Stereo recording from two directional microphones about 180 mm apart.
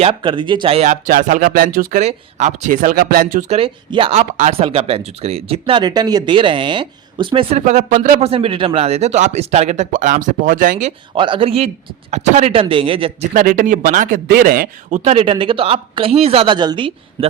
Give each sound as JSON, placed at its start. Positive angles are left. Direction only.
{"t": 0.0, "sound": "speech", "side_deg": -25}
{"t": 3.6, "sound": "speech", "side_deg": -30}
{"t": 7.6, "sound": "speech", "side_deg": -40}
{"t": 11.2, "sound": "speech", "side_deg": -30}
{"t": 13.3, "sound": "speech", "side_deg": -45}